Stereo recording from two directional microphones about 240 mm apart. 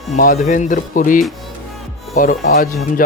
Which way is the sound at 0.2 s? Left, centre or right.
Left.